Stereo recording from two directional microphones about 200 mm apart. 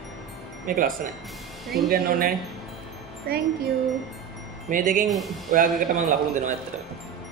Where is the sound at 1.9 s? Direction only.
45° right (ahead or behind).